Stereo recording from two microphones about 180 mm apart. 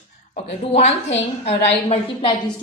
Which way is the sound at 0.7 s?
35° left (ahead or behind).